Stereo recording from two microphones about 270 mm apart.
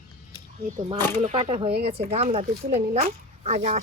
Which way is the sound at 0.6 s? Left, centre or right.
Right.